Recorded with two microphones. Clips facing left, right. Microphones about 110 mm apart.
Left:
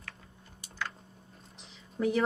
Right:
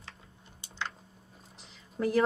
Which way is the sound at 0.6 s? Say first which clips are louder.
Even; 25° right (ahead or behind).